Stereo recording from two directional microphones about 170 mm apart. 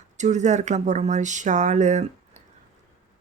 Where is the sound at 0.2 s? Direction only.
45° right (ahead or behind).